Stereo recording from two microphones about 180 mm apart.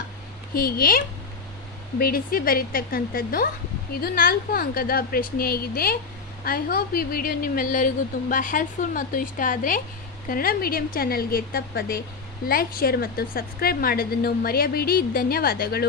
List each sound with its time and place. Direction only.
0.6 s a woman's voice: 55° left (ahead or behind)